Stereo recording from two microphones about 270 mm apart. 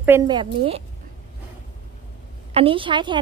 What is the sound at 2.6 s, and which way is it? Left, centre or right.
Speech, centre.